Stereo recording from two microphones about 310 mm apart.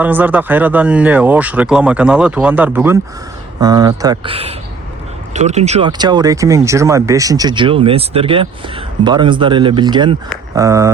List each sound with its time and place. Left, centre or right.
0.0 s speech: centre